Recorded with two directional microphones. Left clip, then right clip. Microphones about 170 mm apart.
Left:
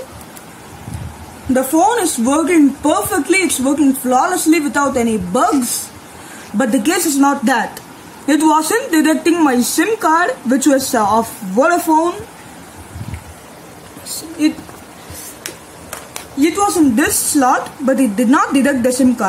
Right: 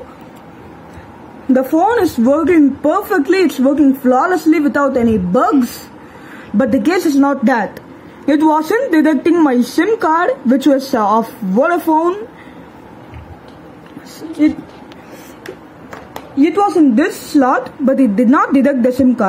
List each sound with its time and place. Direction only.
2.2 s speech: 30° right (ahead or behind)
16.3 s speech: 20° right (ahead or behind)